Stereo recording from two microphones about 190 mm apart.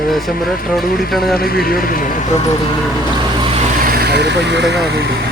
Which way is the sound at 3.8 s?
55° right (ahead or behind).